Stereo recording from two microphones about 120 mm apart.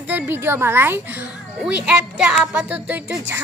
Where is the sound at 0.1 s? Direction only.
15° right (ahead or behind).